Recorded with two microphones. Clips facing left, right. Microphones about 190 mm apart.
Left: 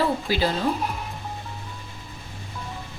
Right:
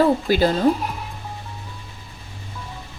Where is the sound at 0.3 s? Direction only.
50° right (ahead or behind).